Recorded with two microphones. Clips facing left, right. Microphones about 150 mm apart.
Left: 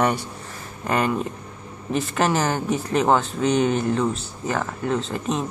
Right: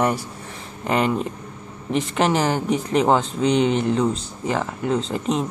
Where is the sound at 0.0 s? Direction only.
5° right (ahead or behind).